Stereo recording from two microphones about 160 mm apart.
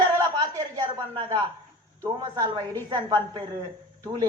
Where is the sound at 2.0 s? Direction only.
25° right (ahead or behind).